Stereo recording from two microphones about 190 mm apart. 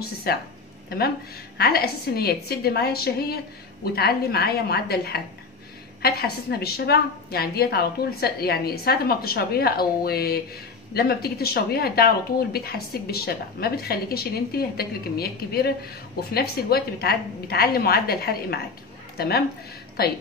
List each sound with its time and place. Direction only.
0.0 s a woman's voice: 55° left (ahead or behind)